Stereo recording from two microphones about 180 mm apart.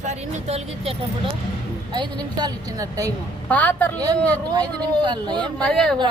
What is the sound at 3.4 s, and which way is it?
Speech, 10° left (ahead or behind).